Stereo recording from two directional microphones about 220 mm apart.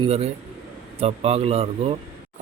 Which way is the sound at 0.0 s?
30° right (ahead or behind).